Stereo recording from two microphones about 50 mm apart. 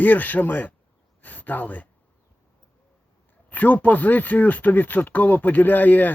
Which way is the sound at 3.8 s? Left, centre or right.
Left.